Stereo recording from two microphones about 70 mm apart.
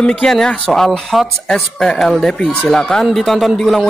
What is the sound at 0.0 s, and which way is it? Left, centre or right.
Speech, centre.